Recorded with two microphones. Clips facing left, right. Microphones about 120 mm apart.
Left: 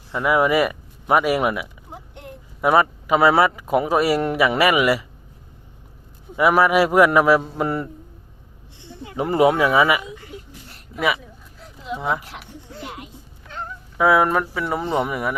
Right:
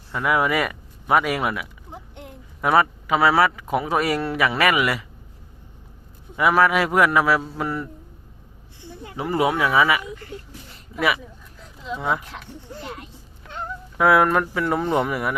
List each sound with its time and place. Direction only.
0.1 s speech: 10° left (ahead or behind)
1.9 s burping: centre (ahead or behind)
2.6 s speech: 15° left (ahead or behind)
6.3 s speech: 15° left (ahead or behind)
7.6 s speech: 25° left (ahead or behind)
9.4 s speech: 35° left (ahead or behind)
9.9 s speech: 15° left (ahead or behind)
10.9 s speech: centre (ahead or behind)
14.0 s speech: centre (ahead or behind)